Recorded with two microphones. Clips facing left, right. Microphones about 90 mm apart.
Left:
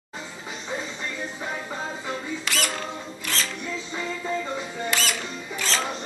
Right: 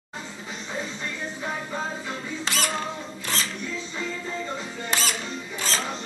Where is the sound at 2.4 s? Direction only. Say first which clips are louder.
Right 2 dB; 25° right (ahead or behind).